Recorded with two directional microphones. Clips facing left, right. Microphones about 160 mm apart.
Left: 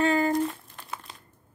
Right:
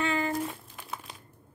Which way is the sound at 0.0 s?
40° left (ahead or behind).